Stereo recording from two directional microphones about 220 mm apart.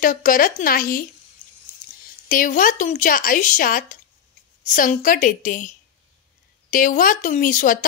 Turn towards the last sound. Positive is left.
turn(degrees=35)  # may be behind; listen again after turning